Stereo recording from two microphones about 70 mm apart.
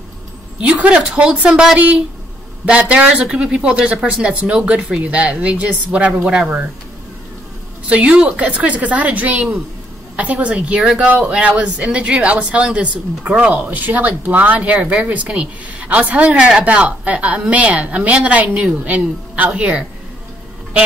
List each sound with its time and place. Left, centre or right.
0.6 s speech: centre
7.9 s speech: centre